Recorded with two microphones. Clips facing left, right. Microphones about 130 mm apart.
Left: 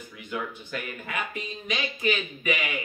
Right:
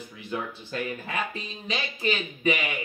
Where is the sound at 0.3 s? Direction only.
30° right (ahead or behind).